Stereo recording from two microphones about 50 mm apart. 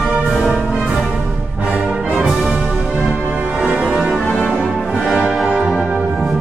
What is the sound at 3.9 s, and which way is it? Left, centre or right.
Music, centre.